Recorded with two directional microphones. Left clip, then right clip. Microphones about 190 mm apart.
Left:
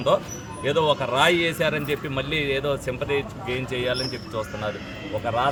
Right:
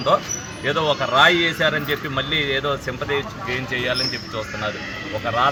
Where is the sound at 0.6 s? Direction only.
30° left (ahead or behind).